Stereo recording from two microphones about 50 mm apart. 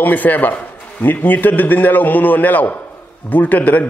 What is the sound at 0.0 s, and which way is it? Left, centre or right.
A man's voice, left.